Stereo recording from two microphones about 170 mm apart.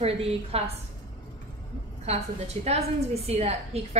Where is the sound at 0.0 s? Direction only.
35° right (ahead or behind).